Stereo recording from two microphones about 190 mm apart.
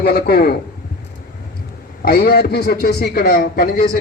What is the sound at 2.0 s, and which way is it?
A man's voice, 55° left (ahead or behind).